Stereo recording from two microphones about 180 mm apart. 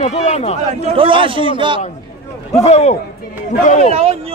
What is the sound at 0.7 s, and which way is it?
A man's voice, 30° right (ahead or behind).